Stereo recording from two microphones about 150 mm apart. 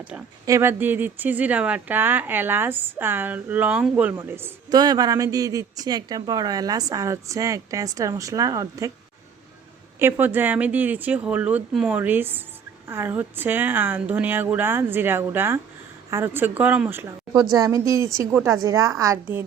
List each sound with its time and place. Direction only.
0.4 s speech: 20° right (ahead or behind)
4.7 s speech: 25° right (ahead or behind)
10.0 s speech: 15° right (ahead or behind)